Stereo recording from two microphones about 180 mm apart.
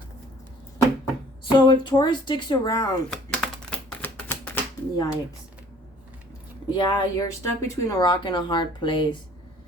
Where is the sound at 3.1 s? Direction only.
5° left (ahead or behind).